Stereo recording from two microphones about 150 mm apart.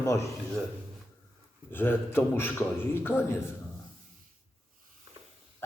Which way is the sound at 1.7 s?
15° left (ahead or behind).